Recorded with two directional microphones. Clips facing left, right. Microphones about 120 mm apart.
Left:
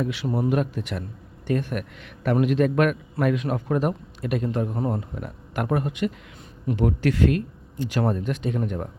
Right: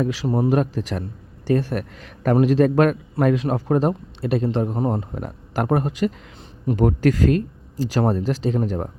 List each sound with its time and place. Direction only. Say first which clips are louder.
0.0 s a man's voice: right 4 dB; 35° right (ahead or behind)